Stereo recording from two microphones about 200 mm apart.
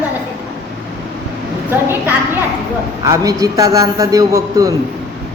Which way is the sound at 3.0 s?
15° right (ahead or behind).